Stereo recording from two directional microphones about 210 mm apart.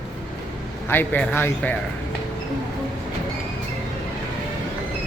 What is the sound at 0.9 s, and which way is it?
Speech, 10° left (ahead or behind).